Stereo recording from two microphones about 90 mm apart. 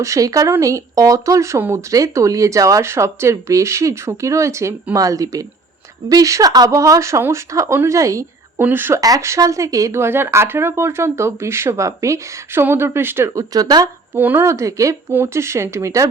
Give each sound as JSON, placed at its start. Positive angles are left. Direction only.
{"t": 0.0, "sound": "speech", "side_deg": -35}
{"t": 8.5, "sound": "speech", "side_deg": -25}
{"t": 9.0, "sound": "speech", "side_deg": -40}
{"t": 13.5, "sound": "speech", "side_deg": -45}
{"t": 14.2, "sound": "speech", "side_deg": -20}
{"t": 14.4, "sound": "speech", "side_deg": -35}